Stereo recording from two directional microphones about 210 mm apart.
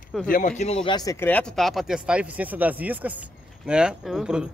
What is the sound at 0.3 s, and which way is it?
Speech, 40° left (ahead or behind).